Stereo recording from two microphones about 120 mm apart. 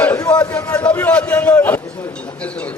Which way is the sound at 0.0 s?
10° left (ahead or behind).